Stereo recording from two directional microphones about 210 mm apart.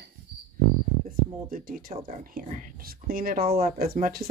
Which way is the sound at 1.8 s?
40° right (ahead or behind).